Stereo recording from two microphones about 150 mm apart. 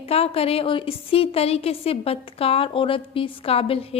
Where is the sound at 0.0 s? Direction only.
40° left (ahead or behind).